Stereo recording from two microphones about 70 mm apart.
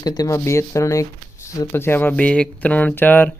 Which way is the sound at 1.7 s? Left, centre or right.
Left.